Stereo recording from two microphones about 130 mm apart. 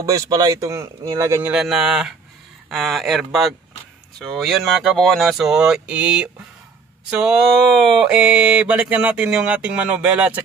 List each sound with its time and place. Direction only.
0.0 s speech: 25° right (ahead or behind)
1.5 s speech: 5° right (ahead or behind)
7.1 s a sound: 5° right (ahead or behind)